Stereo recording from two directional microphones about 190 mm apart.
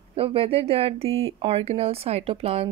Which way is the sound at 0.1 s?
30° right (ahead or behind).